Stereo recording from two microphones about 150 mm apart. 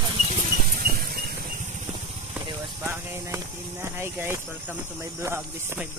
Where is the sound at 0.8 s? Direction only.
90° right.